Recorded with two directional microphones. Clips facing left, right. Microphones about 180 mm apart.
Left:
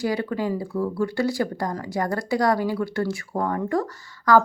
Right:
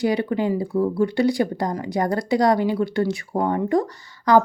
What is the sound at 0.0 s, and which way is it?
Speech, 20° right (ahead or behind).